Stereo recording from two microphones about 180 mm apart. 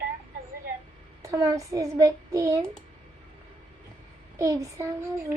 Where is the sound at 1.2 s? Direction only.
20° right (ahead or behind).